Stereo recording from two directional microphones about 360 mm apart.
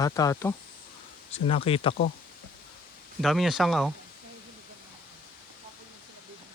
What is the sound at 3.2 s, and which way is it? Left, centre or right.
Speech, centre.